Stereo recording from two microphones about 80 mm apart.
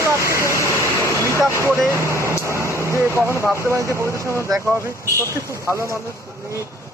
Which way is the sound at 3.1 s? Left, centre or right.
Right.